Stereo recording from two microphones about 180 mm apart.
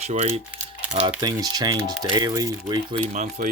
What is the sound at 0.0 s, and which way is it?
Speech, 40° right (ahead or behind).